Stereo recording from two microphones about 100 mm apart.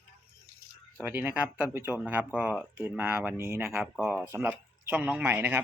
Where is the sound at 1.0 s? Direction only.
15° right (ahead or behind).